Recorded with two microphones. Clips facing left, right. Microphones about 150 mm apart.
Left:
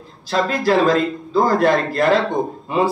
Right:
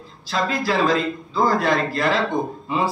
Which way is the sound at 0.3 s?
50° left (ahead or behind).